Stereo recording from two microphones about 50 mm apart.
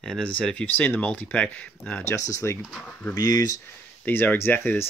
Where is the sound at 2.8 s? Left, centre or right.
Left.